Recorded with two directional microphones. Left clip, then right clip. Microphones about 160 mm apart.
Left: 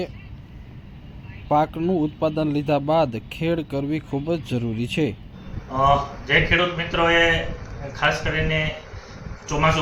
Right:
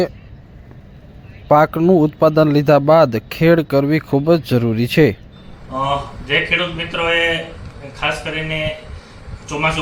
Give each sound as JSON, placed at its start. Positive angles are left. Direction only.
{"t": 1.5, "sound": "a man's voice", "side_deg": -40}
{"t": 5.7, "sound": "a man's voice", "side_deg": 0}